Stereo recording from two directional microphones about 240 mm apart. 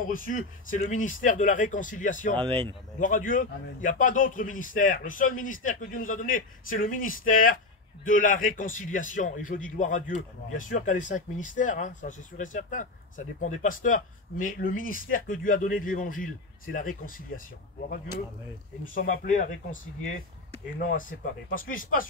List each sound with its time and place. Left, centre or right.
0.1 s a man's voice: left
18.9 s a man's voice: left
21.5 s a man's voice: left